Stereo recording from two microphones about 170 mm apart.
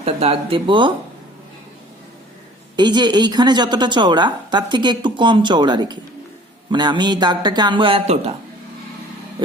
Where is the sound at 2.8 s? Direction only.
25° right (ahead or behind).